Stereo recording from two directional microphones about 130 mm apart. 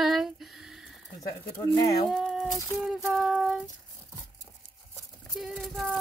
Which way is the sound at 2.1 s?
5° right (ahead or behind).